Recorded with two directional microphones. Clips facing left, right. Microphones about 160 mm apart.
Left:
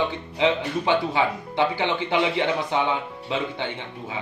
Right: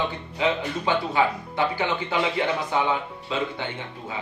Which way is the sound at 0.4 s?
20° left (ahead or behind).